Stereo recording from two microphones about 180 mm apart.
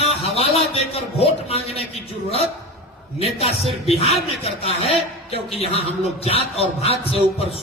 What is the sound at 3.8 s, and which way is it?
A man's voice, 35° left (ahead or behind).